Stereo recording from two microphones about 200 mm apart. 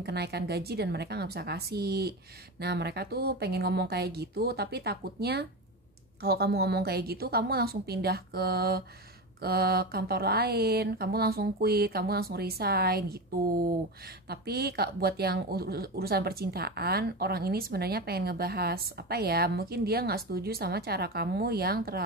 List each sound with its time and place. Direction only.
0.0 s a woman's voice: 55° right (ahead or behind)
14.3 s a woman's voice: 50° right (ahead or behind)